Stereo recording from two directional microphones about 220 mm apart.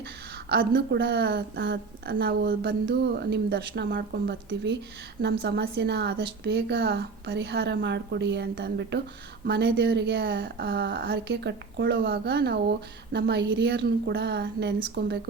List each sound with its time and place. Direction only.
0.4 s speech: 45° right (ahead or behind)